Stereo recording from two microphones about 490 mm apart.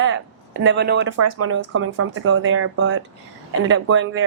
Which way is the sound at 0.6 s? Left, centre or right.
Right.